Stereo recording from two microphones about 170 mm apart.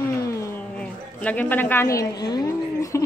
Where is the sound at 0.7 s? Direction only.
10° left (ahead or behind).